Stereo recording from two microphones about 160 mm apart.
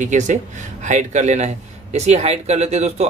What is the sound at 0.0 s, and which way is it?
Speech, 50° right (ahead or behind).